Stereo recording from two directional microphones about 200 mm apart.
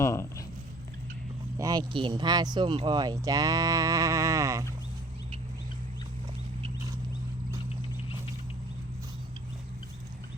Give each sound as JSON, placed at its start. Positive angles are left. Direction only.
{"t": 0.0, "sound": "speech", "side_deg": 15}
{"t": 1.5, "sound": "speech", "side_deg": -20}